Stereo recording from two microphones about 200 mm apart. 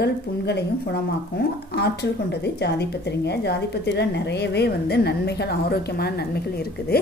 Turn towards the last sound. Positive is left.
turn(degrees=50)  # may be behind; listen again after turning